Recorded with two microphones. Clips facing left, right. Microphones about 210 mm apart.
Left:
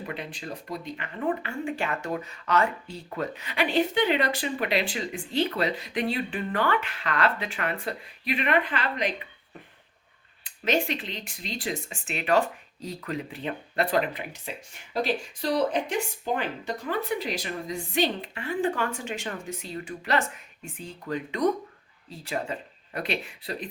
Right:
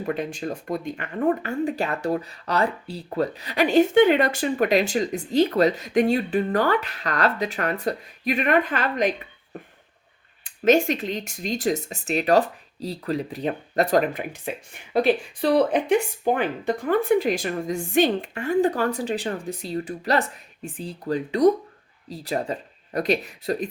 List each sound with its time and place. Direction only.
0.0 s speech: 45° right (ahead or behind)